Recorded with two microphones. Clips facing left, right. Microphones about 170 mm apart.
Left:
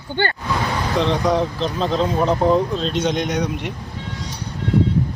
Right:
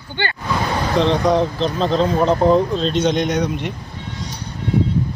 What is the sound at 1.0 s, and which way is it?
Speech, 5° left (ahead or behind).